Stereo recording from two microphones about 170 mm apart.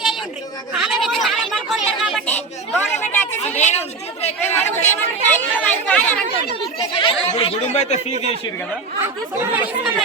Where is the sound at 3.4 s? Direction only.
40° left (ahead or behind).